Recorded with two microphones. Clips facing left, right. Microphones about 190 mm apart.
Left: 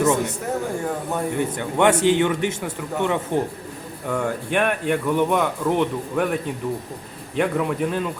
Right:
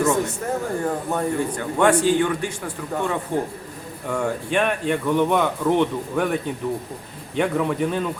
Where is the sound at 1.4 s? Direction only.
20° left (ahead or behind).